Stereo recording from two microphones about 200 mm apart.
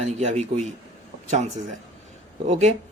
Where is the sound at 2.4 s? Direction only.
35° right (ahead or behind).